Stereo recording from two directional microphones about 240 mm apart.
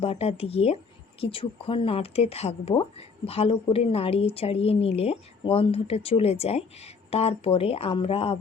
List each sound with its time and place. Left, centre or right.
0.0 s speech: left